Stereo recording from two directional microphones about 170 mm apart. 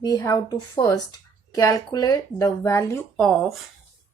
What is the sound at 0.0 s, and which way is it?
Speech, 20° left (ahead or behind).